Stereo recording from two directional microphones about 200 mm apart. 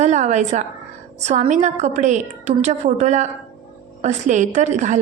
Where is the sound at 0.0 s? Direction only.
35° right (ahead or behind).